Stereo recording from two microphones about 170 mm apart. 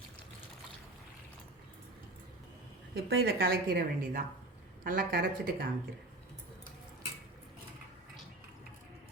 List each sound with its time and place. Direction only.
2.9 s a woman's voice: 65° right (ahead or behind)